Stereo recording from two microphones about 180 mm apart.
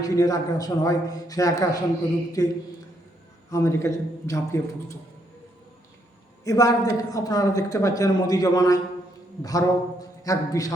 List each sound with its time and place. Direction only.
0.0 s a man's voice: 20° left (ahead or behind)
6.4 s a man's voice: 20° left (ahead or behind)